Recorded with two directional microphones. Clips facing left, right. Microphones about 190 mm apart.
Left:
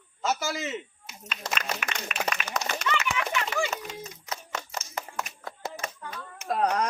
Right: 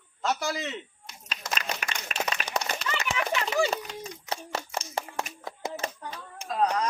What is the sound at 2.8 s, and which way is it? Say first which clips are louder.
Clip-clop: left 3 dB; 35° right (ahead or behind).